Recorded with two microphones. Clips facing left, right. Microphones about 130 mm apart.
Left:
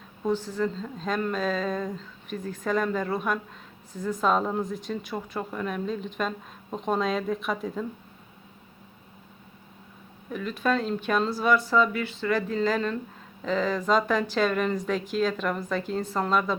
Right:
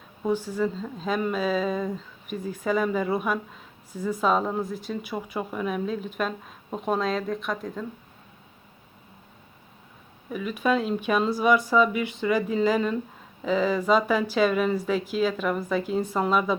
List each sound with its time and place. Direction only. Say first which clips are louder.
0.2 s speech: right 1 dB; 10° right (ahead or behind)
10.2 s speech: right 2 dB; 5° right (ahead or behind)